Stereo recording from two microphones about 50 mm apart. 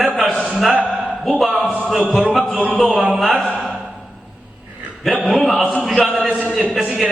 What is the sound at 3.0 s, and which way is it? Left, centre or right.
Speech, centre.